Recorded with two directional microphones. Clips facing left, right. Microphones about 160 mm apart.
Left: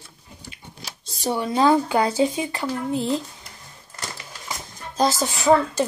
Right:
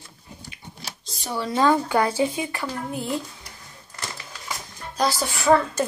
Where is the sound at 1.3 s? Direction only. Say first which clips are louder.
Left 2 dB; 20° left (ahead or behind).